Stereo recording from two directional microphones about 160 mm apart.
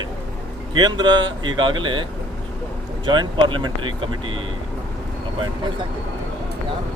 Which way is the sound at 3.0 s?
30° right (ahead or behind).